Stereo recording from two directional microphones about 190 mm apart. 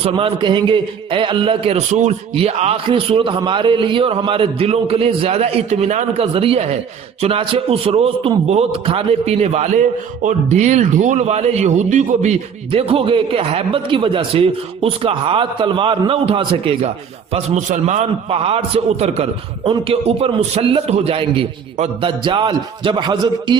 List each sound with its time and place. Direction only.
0.0 s a man's voice: 30° right (ahead or behind)